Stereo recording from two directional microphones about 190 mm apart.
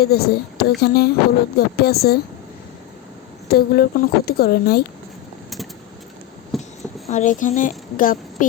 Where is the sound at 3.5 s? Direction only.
55° left (ahead or behind).